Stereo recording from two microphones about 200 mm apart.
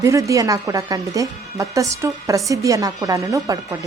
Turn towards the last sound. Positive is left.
turn(degrees=-15)  # may be behind; listen again after turning